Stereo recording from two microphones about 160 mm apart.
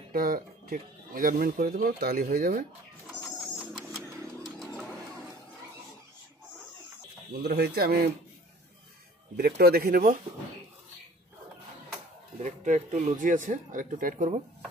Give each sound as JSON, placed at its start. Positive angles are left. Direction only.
{"t": 0.1, "sound": "speech", "side_deg": -65}
{"t": 3.2, "sound": "bird", "side_deg": 0}
{"t": 7.4, "sound": "speech", "side_deg": -90}
{"t": 9.4, "sound": "speech", "side_deg": -75}
{"t": 12.4, "sound": "speech", "side_deg": -50}